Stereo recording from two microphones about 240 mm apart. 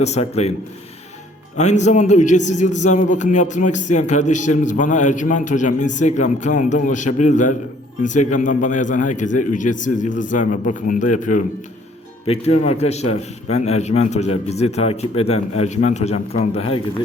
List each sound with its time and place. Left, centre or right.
0.0 s a man's voice: left
1.5 s a man's voice: left